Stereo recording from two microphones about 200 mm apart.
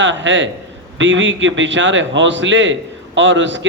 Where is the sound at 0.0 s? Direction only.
65° right (ahead or behind).